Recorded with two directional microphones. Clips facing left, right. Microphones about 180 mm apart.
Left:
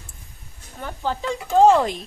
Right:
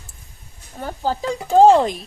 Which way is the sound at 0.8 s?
35° right (ahead or behind).